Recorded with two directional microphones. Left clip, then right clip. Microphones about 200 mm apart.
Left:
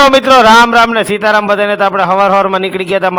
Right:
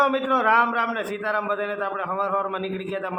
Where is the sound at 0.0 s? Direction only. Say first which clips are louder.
Left 15 dB; 50° left (ahead or behind).